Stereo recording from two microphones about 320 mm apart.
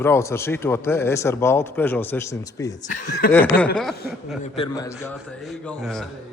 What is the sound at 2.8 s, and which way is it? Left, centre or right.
Speech, left.